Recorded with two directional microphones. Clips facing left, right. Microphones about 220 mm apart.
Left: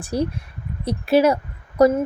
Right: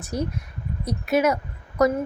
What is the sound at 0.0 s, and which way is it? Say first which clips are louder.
Speech: left 5 dB; 30° left (ahead or behind).